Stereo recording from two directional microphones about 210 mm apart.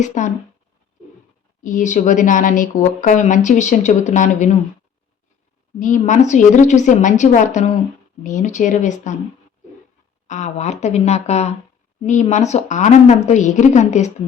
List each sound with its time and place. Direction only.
0.0 s speech: 35° left (ahead or behind)
1.6 s speech: 35° left (ahead or behind)
5.8 s speech: 35° left (ahead or behind)
10.2 s speech: 35° left (ahead or behind)